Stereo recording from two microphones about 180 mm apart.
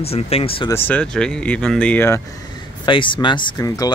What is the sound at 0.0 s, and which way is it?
Speech, 35° left (ahead or behind).